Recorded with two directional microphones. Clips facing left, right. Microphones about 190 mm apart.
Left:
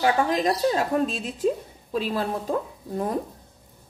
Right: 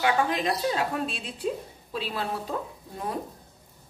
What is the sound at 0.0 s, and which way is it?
A woman's voice, 40° left (ahead or behind).